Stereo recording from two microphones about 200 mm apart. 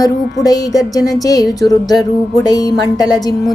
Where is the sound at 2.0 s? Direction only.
20° left (ahead or behind).